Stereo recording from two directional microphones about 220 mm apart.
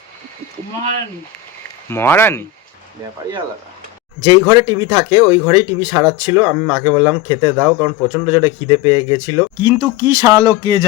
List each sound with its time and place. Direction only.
1.9 s speech: 10° left (ahead or behind)
4.2 s speech: 20° right (ahead or behind)